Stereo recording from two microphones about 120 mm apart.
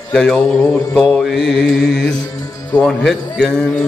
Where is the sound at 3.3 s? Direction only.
5° left (ahead or behind).